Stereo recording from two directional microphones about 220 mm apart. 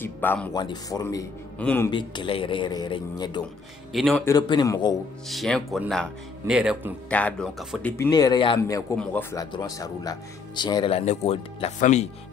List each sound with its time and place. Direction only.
0.0 s speech: 10° left (ahead or behind)
1.9 s speech: 20° left (ahead or behind)
3.9 s speech: centre (ahead or behind)
4.3 s speech: 20° left (ahead or behind)
5.3 s speech: centre (ahead or behind)
7.1 s speech: 5° left (ahead or behind)
8.0 s speech: 15° left (ahead or behind)